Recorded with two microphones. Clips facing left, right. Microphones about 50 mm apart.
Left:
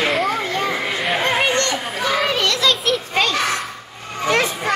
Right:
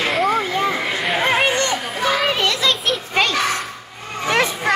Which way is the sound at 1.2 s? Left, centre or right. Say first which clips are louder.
Right 2 dB; centre.